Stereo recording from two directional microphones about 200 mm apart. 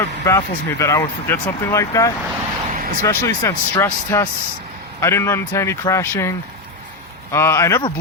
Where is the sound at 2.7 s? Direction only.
45° right (ahead or behind).